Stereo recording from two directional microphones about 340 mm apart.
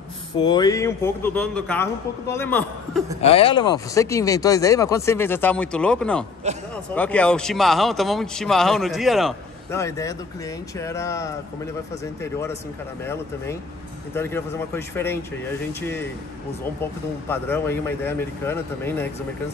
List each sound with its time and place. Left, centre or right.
0.4 s speech: centre
3.2 s speech: centre
6.4 s a man's voice: centre
6.9 s speech: centre
17.3 s speech: centre